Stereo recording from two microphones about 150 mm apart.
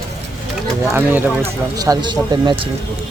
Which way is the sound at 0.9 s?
10° right (ahead or behind).